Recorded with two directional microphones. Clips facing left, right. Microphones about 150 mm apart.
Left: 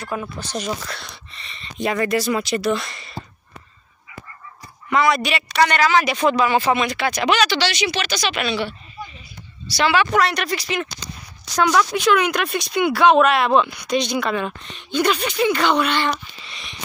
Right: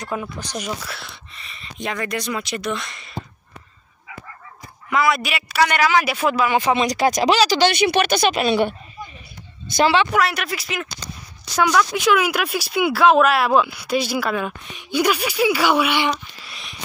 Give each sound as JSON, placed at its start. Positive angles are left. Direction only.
{"t": 0.0, "sound": "speech", "side_deg": -15}
{"t": 4.8, "sound": "speech", "side_deg": 0}
{"t": 6.8, "sound": "speech", "side_deg": -40}
{"t": 10.0, "sound": "speech", "side_deg": -5}
{"t": 11.9, "sound": "speech", "side_deg": -5}